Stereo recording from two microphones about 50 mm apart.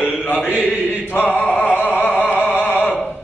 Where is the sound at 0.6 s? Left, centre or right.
Left.